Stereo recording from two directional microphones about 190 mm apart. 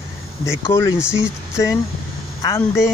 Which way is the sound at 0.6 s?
15° left (ahead or behind).